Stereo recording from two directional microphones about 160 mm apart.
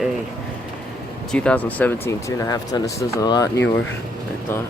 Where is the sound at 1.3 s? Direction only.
5° left (ahead or behind); by 3.6 s 25° left (ahead or behind).